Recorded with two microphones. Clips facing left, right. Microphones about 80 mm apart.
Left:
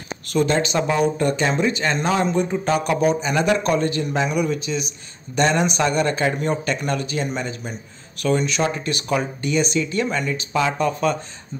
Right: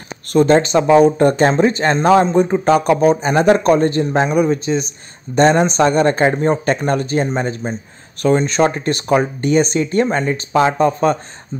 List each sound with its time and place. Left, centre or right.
0.3 s a man's voice: right